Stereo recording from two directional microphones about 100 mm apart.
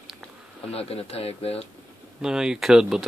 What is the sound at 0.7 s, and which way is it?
Speech, 85° left.